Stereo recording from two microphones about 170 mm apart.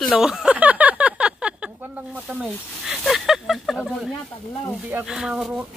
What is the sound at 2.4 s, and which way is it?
Speech, centre (ahead or behind).